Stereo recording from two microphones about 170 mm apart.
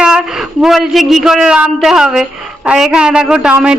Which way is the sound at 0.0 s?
5° right (ahead or behind).